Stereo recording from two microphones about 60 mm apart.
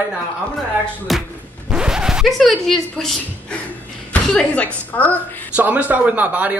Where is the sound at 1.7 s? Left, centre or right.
Centre.